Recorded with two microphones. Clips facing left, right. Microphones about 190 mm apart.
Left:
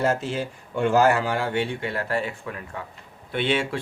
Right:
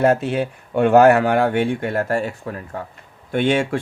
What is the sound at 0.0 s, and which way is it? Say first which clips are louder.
Speech: right 7 dB; 60° right (ahead or behind).